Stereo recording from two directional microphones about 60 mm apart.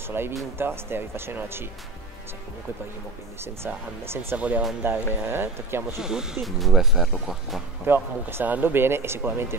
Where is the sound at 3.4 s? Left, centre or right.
Right.